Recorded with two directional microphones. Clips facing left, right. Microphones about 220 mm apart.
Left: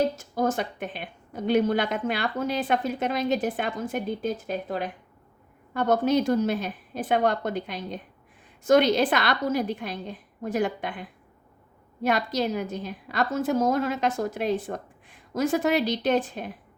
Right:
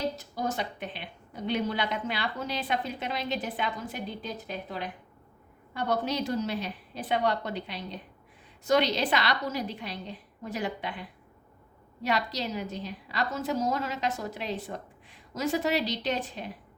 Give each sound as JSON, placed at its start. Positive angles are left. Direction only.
{"t": 0.2, "sound": "a woman's voice", "side_deg": 50}
{"t": 12.0, "sound": "a woman's voice", "side_deg": 50}